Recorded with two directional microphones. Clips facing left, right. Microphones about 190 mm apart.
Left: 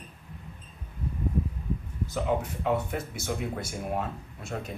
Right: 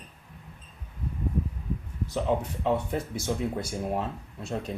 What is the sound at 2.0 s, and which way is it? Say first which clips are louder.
Speech: right 1 dB; 35° right (ahead or behind).